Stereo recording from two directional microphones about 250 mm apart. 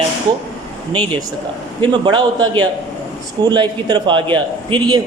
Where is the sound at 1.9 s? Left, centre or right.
Centre.